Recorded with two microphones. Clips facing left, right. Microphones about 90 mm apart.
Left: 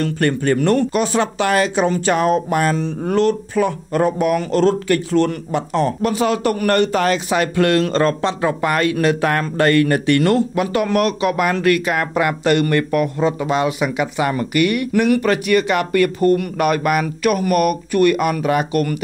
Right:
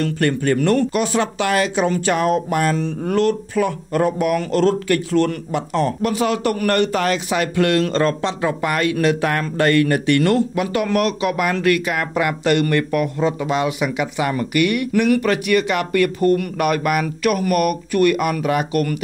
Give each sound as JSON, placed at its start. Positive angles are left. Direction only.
{"t": 0.0, "sound": "speech", "side_deg": 35}